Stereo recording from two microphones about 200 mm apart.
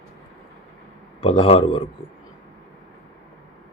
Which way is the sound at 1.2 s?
30° left (ahead or behind).